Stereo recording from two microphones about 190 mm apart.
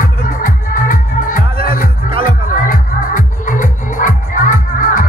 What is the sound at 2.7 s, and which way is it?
Music, 45° left (ahead or behind).